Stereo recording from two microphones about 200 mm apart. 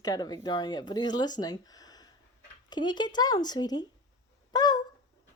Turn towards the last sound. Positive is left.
turn(degrees=20)  # may be behind; listen again after turning